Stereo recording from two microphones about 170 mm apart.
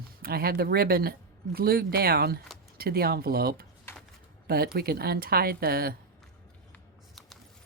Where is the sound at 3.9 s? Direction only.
15° left (ahead or behind).